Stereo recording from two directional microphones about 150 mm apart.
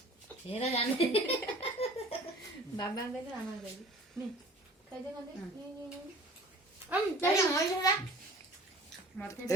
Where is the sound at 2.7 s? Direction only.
25° left (ahead or behind).